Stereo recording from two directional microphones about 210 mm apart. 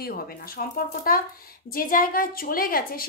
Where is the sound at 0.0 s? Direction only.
45° left (ahead or behind).